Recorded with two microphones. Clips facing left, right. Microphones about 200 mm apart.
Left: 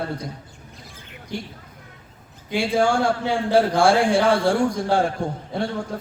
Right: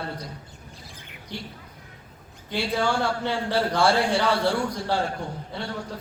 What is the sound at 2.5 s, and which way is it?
A man's voice, 50° left (ahead or behind).